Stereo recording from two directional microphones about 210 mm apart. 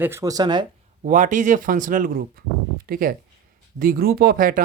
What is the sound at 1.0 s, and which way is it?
Speech, 35° right (ahead or behind).